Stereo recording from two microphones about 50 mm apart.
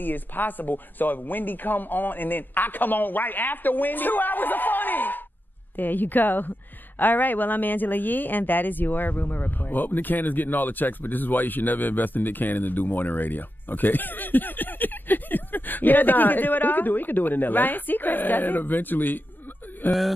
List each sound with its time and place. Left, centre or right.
0.0 s speech: left
19.9 s speech: centre